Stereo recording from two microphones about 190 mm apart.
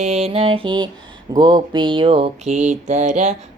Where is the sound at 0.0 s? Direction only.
35° right (ahead or behind).